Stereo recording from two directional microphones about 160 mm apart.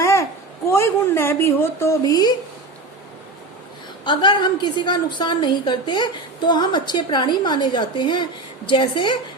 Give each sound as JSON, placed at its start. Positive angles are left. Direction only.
{"t": 0.0, "sound": "a sound", "side_deg": 20}
{"t": 0.7, "sound": "a woman's voice", "side_deg": 15}
{"t": 4.0, "sound": "a woman's voice", "side_deg": 30}